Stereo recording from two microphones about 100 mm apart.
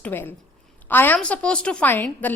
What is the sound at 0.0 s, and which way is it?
A woman's voice, 20° left (ahead or behind).